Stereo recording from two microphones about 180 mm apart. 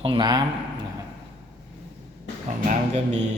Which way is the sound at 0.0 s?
25° right (ahead or behind).